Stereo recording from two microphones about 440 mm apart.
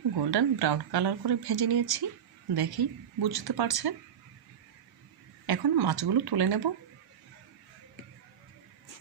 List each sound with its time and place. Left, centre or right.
0.2 s speech: right
5.5 s speech: right